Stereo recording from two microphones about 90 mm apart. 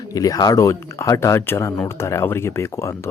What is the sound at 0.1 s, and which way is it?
Speech, 40° left (ahead or behind).